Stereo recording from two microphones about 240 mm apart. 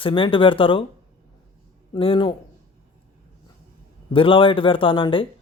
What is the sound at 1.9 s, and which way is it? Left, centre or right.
Speech, left.